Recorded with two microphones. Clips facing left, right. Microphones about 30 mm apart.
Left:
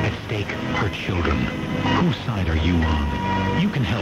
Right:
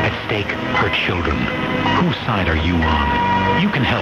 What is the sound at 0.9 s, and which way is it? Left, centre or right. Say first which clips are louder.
Speech: right 9 dB; right.